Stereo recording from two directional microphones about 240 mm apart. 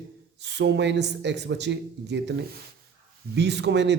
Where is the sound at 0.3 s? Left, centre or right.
Right.